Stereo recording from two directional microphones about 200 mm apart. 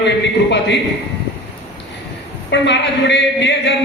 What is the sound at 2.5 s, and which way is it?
A man's voice, 60° left (ahead or behind).